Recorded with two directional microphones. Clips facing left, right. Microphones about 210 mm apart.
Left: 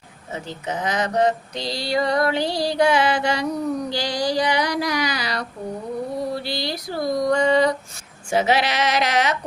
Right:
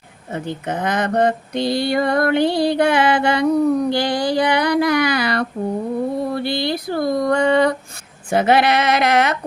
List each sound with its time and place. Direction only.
0.3 s speech: 55° right (ahead or behind)